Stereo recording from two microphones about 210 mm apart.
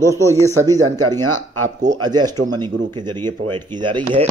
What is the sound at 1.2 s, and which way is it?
Speech, 90° right.